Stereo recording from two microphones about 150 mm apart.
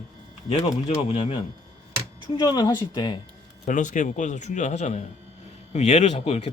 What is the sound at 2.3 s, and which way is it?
Speech, 30° left (ahead or behind).